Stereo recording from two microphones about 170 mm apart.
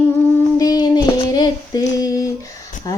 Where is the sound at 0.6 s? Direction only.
25° left (ahead or behind).